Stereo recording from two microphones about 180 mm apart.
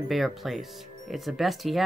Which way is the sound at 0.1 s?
Centre (ahead or behind).